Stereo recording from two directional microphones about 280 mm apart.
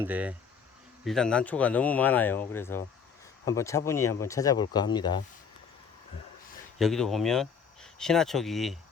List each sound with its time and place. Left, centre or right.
0.0 s speech: centre
6.7 s speech: centre